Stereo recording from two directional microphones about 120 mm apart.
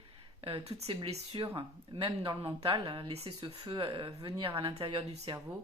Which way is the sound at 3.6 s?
45° right (ahead or behind).